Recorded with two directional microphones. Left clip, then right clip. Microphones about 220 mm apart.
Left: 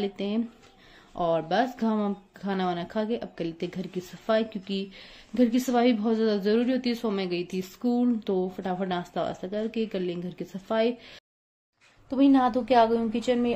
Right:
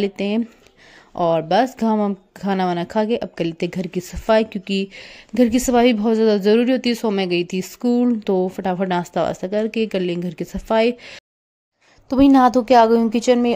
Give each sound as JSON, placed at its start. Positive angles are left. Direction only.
{"t": 0.0, "sound": "speech", "side_deg": -40}